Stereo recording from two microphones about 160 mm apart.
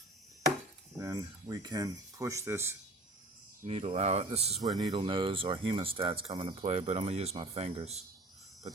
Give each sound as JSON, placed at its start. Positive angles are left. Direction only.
{"t": 0.9, "sound": "speech", "side_deg": -25}
{"t": 3.6, "sound": "speech", "side_deg": -40}